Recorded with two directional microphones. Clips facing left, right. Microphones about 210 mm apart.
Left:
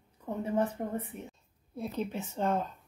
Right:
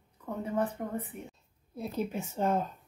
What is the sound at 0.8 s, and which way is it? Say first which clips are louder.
Speech: left 1 dB; 30° left (ahead or behind).